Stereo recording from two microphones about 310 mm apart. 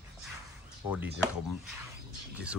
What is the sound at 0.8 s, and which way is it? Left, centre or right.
Speech, centre.